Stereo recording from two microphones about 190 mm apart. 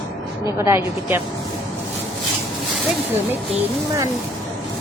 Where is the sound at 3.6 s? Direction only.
15° right (ahead or behind).